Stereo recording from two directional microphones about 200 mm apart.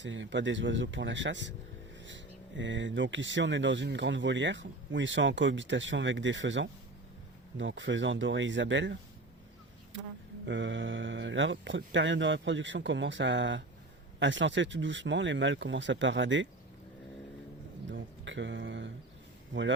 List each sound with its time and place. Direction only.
0.0 s speech: 65° right (ahead or behind)
10.4 s speech: 65° right (ahead or behind)
17.9 s speech: 65° right (ahead or behind)